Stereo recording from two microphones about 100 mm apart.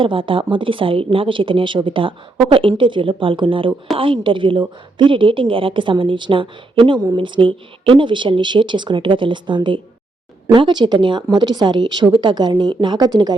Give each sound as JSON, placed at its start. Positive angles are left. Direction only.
{"t": 0.0, "sound": "speech", "side_deg": -60}